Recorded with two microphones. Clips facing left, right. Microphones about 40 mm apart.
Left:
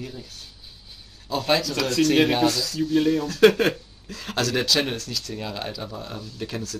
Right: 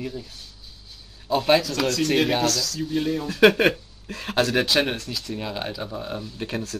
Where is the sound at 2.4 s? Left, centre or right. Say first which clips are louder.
Left 2 dB; left.